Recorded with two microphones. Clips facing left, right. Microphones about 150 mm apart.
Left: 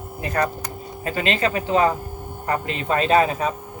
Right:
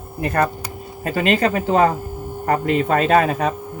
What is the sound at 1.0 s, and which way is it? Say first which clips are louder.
Speech: right 4 dB; 45° right (ahead or behind).